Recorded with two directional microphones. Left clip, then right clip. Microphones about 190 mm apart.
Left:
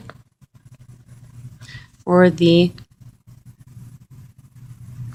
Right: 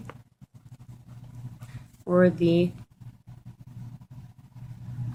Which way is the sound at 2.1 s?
45° left (ahead or behind).